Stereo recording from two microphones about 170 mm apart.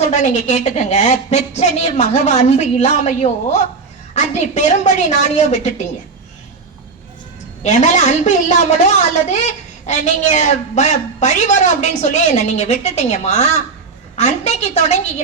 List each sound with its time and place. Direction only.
0.1 s a woman's voice: 45° left (ahead or behind)
7.6 s a woman's voice: 45° left (ahead or behind)